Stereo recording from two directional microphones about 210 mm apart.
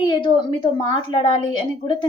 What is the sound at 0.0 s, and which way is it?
A woman's voice, 20° left (ahead or behind).